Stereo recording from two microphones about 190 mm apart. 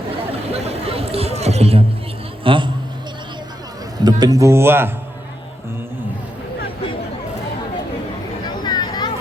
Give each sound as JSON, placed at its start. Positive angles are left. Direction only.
{"t": 0.5, "sound": "chatter", "side_deg": -30}
{"t": 2.4, "sound": "a man's voice", "side_deg": -25}
{"t": 4.0, "sound": "speech", "side_deg": -20}
{"t": 8.6, "sound": "a sound", "side_deg": 20}